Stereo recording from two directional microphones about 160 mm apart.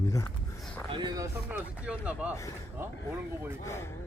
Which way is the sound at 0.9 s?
30° right (ahead or behind).